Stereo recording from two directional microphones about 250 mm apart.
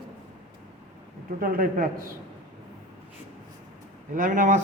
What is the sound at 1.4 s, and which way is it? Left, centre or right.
Speech, right.